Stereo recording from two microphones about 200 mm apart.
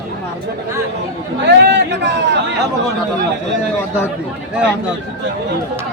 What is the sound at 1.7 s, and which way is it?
Speech, 60° right (ahead or behind).